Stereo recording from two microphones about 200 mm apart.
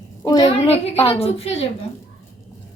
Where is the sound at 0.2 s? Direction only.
15° left (ahead or behind).